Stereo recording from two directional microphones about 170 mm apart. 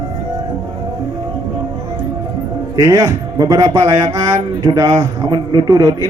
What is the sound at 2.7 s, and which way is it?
Speech, 20° right (ahead or behind).